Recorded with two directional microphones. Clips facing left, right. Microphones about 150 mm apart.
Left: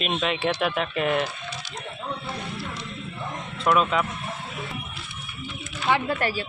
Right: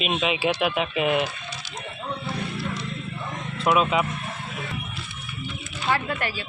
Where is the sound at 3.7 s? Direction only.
10° right (ahead or behind).